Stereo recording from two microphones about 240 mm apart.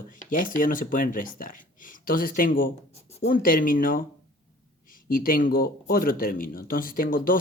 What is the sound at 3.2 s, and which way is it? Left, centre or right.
Speech, left.